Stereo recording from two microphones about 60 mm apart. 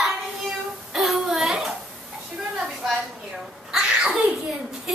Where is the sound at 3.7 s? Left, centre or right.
Centre.